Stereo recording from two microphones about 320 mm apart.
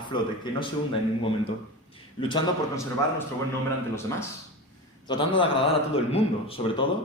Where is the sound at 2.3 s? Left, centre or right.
Centre.